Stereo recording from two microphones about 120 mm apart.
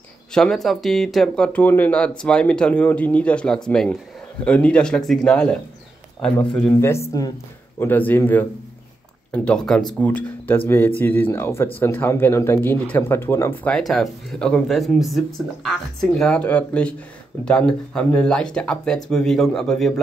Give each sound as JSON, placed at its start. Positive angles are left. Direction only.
{"t": 0.3, "sound": "speech", "side_deg": 5}
{"t": 7.1, "sound": "speech", "side_deg": 30}
{"t": 7.8, "sound": "speech", "side_deg": 15}
{"t": 13.7, "sound": "speech", "side_deg": 5}